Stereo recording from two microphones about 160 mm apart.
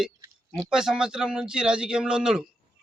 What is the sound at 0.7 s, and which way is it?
A man's voice, 5° right (ahead or behind).